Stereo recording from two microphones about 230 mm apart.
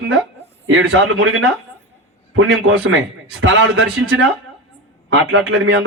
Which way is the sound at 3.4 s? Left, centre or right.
Right.